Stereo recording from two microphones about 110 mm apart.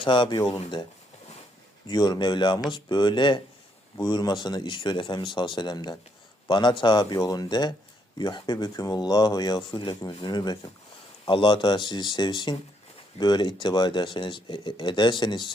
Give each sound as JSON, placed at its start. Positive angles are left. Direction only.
{"t": 0.0, "sound": "speech", "side_deg": 45}
{"t": 1.9, "sound": "speech", "side_deg": 40}